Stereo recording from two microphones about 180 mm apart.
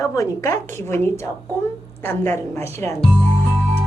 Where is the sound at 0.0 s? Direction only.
15° left (ahead or behind).